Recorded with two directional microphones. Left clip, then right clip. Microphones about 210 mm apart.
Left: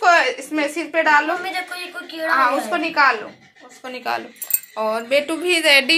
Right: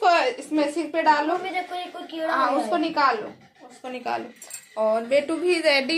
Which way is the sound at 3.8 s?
5° left (ahead or behind).